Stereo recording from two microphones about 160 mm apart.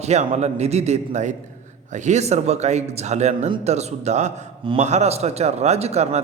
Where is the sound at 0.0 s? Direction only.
45° right (ahead or behind).